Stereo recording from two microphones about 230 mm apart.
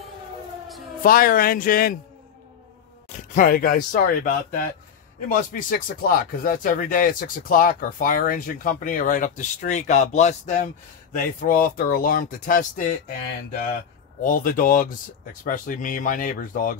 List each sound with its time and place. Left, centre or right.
1.0 s speech: left
3.3 s speech: left
14.2 s speech: left